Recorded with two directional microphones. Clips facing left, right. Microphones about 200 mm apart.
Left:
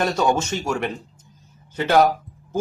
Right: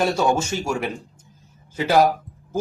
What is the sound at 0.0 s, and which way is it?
A man's voice, 10° right (ahead or behind).